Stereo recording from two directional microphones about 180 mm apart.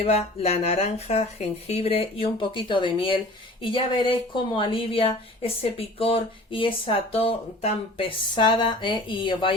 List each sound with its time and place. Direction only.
0.0 s speech: 35° left (ahead or behind)